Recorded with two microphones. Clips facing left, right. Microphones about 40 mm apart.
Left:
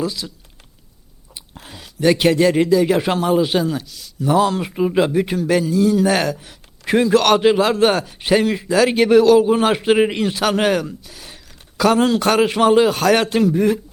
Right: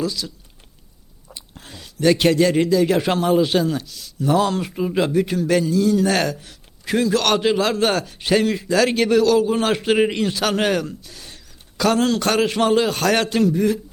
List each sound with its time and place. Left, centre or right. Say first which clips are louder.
0.0 s a man's voice: left 1 dB; centre
1.3 s speech: left 1 dB; centre
4.6 s a man's voice: left 4 dB; centre
6.8 s a man's voice: left 4 dB; left; by 13.2 s centre
13.3 s a man's voice: left 2 dB; centre